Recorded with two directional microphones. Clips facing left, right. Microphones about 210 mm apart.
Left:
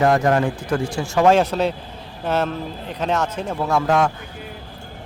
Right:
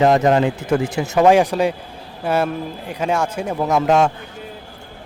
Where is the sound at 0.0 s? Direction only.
20° right (ahead or behind).